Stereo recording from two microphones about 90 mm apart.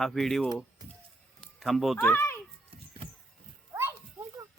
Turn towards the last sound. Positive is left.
turn(degrees=-30)  # may be behind; listen again after turning